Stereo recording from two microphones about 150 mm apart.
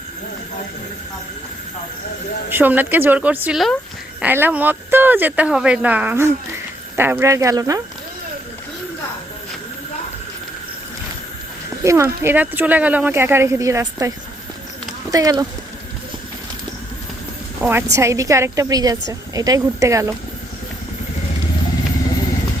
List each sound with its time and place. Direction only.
2.5 s a woman's voice: 15° right (ahead or behind)
11.8 s speech: 20° right (ahead or behind)
15.1 s a woman's voice: 25° right (ahead or behind)
17.6 s a woman's voice: 15° right (ahead or behind)